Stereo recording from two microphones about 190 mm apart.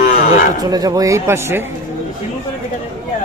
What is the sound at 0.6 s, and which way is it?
Speech, 20° right (ahead or behind).